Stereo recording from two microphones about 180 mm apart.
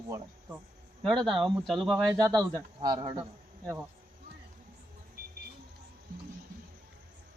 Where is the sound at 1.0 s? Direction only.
Centre (ahead or behind).